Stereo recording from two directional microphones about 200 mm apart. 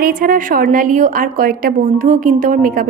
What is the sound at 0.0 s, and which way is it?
A woman's voice, 45° right (ahead or behind).